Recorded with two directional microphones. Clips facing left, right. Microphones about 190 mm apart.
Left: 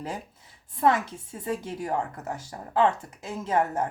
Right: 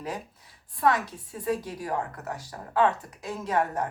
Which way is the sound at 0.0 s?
25° left (ahead or behind).